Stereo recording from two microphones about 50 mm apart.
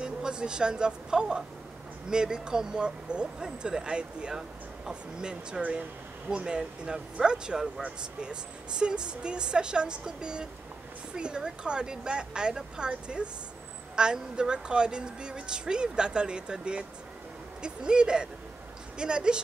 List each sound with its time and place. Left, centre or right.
0.0 s speech: centre
5.6 s speech: right